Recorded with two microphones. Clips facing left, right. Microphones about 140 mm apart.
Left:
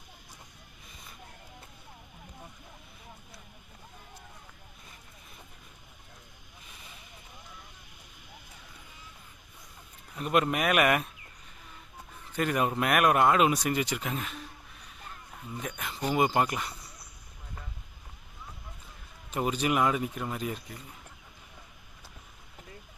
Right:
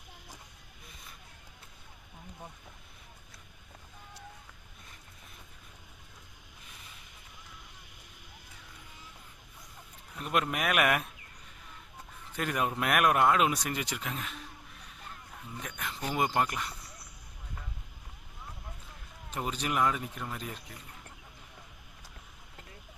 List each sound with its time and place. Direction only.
10.2 s speech: centre (ahead or behind)
12.4 s speech: centre (ahead or behind)
15.6 s speech: 5° left (ahead or behind)
19.3 s speech: 5° left (ahead or behind)